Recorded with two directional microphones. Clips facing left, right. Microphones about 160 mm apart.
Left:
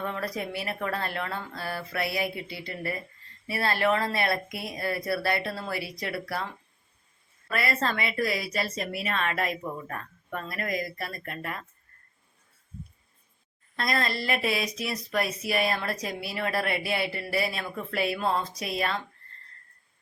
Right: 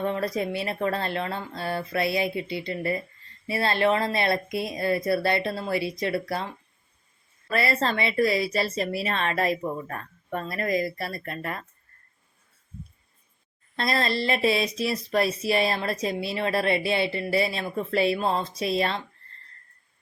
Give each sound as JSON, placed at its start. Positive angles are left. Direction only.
{"t": 0.0, "sound": "speech", "side_deg": -25}
{"t": 7.5, "sound": "speech", "side_deg": -30}
{"t": 13.7, "sound": "speech", "side_deg": -30}